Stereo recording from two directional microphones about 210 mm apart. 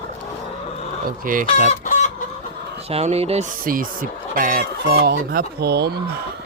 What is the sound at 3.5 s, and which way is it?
Speech, 40° right (ahead or behind).